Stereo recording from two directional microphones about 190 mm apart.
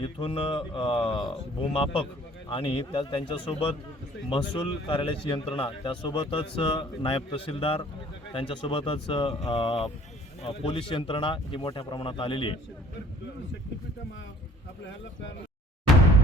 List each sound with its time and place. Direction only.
0.0 s a man's voice: 30° left (ahead or behind)